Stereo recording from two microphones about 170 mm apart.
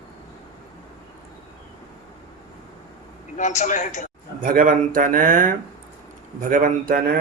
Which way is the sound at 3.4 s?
45° left (ahead or behind).